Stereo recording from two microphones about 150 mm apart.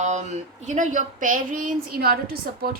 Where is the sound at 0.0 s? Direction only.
50° right (ahead or behind).